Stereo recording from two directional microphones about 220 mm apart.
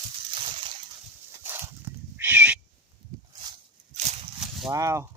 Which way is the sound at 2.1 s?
10° right (ahead or behind).